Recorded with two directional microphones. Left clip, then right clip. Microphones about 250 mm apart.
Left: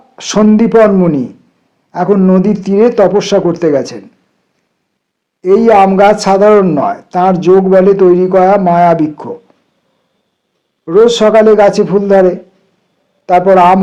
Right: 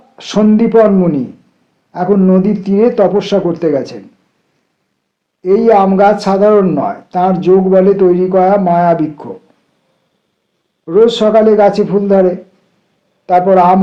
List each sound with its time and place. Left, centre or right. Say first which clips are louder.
0.2 s speech: left 2 dB; left
5.4 s speech: left 2 dB; left
10.8 s speech: left 2 dB; left